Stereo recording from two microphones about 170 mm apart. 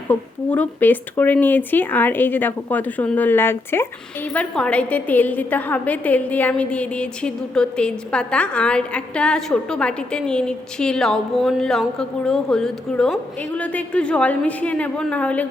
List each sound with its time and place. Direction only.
0.1 s a woman's voice: 10° left (ahead or behind)